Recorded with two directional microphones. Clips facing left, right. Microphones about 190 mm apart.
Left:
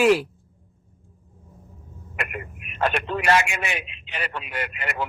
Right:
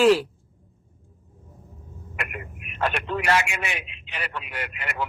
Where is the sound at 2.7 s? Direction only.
25° left (ahead or behind).